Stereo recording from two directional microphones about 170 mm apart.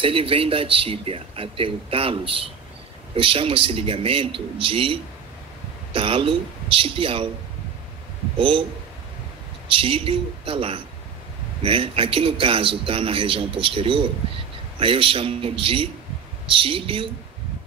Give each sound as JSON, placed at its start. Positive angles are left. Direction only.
{"t": 0.0, "sound": "speech", "side_deg": -30}
{"t": 8.4, "sound": "speech", "side_deg": -30}
{"t": 9.7, "sound": "speech", "side_deg": -30}